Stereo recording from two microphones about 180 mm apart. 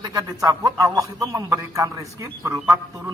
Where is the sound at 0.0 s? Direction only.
20° right (ahead or behind).